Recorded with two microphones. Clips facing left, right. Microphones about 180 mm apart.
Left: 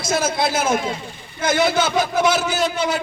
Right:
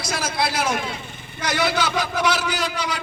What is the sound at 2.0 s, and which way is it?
Speech, 45° left (ahead or behind).